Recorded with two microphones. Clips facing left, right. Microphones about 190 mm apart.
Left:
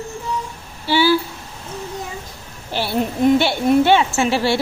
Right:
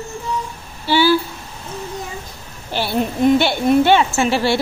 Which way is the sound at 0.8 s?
5° left (ahead or behind).